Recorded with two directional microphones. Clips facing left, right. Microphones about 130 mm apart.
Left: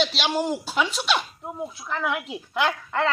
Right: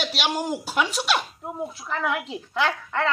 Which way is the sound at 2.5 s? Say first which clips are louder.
Left 1 dB; 15° left (ahead or behind).